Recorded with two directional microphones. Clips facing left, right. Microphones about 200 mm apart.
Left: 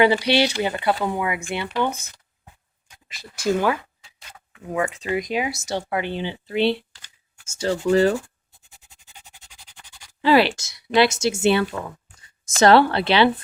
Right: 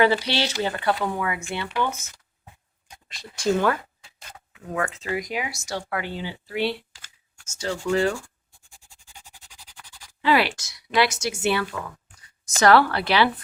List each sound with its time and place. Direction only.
0.0 s speech: 15° left (ahead or behind)
3.1 s speech: 5° left (ahead or behind)
4.9 s speech: 20° left (ahead or behind); by 8.2 s 40° left (ahead or behind)
10.2 s speech: 30° left (ahead or behind)